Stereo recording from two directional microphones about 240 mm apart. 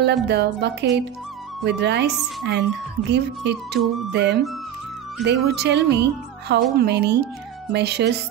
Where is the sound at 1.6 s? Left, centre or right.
Right.